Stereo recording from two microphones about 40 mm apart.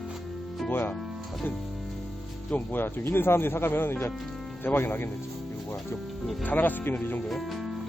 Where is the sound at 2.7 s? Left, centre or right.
Left.